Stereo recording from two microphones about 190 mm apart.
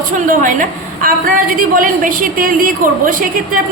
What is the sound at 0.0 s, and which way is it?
A woman's voice, 45° right (ahead or behind).